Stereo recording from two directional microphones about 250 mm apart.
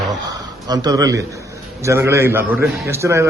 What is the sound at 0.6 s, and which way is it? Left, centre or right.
A man's voice, centre.